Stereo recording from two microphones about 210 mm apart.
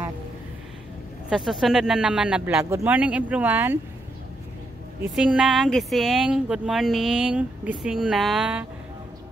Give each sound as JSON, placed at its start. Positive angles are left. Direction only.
{"t": 1.3, "sound": "speech", "side_deg": 0}
{"t": 5.1, "sound": "speech", "side_deg": -5}